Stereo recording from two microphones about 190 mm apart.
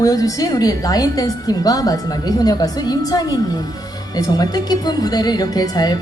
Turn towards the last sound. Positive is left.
turn(degrees=20)  # may be behind; listen again after turning